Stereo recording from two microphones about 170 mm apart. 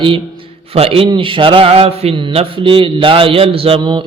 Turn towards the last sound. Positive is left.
turn(degrees=-25)  # may be behind; listen again after turning